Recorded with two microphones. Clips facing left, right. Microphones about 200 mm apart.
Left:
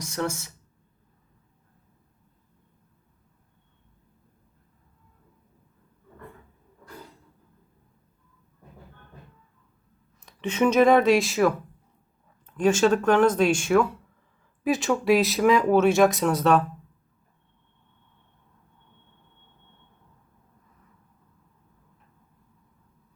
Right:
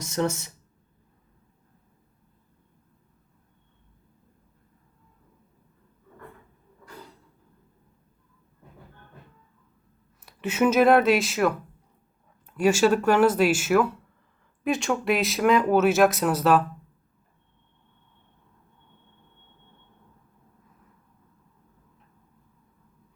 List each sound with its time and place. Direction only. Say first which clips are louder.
0.0 s speech: right 3 dB; 20° right (ahead or behind)
10.2 s speech: even; 5° right (ahead or behind)